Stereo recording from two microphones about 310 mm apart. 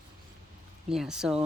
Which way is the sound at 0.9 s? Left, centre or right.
Centre.